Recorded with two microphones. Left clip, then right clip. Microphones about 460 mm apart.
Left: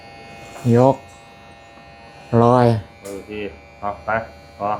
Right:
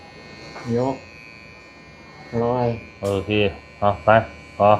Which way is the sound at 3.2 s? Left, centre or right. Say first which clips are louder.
Right 9 dB; right.